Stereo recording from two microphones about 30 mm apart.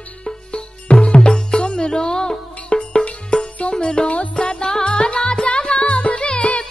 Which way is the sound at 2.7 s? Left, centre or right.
Left.